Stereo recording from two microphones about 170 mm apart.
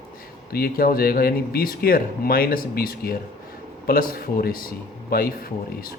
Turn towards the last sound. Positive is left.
turn(degrees=60)  # may be behind; listen again after turning